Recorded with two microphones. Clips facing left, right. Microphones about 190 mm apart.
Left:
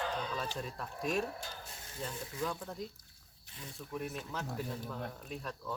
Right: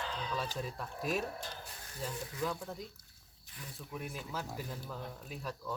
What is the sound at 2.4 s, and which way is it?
Speech, 5° right (ahead or behind).